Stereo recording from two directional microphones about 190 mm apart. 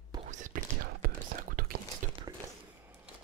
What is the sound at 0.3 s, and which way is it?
Whispering, 40° right (ahead or behind).